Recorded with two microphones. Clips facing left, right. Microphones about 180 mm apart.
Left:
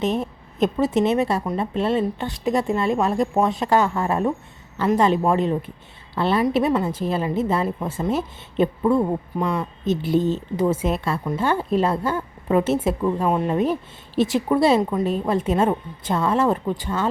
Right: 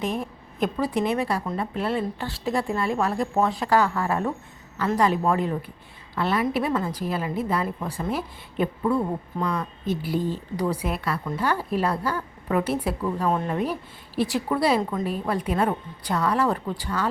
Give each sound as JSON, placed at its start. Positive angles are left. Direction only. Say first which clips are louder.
{"t": 0.0, "sound": "a woman's voice", "louder": "left 5 dB", "side_deg": 25}